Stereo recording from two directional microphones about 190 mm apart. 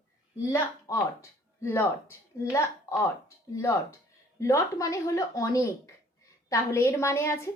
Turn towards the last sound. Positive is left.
turn(degrees=15)  # may be behind; listen again after turning